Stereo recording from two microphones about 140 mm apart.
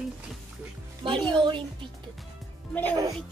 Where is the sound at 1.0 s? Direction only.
35° right (ahead or behind).